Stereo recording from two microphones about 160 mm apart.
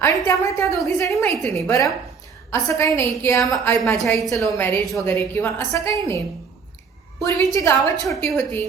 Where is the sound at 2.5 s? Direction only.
15° left (ahead or behind).